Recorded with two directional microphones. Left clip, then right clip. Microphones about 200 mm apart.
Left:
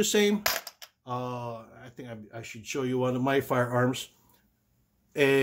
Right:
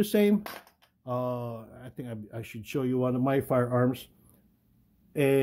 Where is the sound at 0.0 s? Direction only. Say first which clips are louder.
Left 1 dB; 30° right (ahead or behind).